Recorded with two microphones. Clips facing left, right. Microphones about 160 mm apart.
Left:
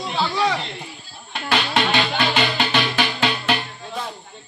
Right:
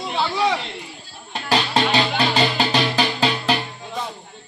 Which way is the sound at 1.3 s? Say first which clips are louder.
Right 1 dB; 35° right (ahead or behind).